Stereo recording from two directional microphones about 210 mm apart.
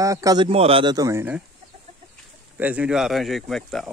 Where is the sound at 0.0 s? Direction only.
15° right (ahead or behind).